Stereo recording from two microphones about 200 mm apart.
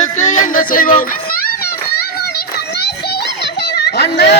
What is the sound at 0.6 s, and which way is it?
Speech, 45° left (ahead or behind).